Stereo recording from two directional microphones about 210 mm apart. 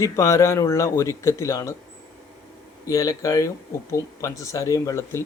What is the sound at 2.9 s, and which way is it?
Speech, 15° left (ahead or behind).